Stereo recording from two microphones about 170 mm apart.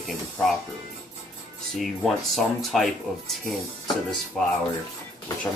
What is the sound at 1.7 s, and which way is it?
Speech, centre (ahead or behind).